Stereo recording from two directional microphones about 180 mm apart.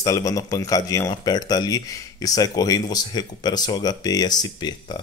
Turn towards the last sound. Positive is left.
turn(degrees=25)  # may be behind; listen again after turning